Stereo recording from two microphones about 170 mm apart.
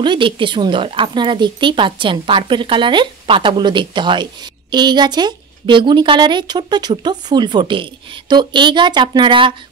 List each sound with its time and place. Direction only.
0.0 s speech: 30° right (ahead or behind)